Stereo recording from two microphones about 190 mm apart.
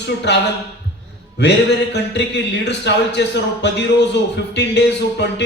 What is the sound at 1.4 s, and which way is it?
Speech, 65° left (ahead or behind).